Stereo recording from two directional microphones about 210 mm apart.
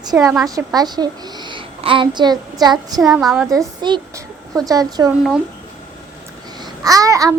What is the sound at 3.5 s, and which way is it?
A woman's voice, 20° right (ahead or behind).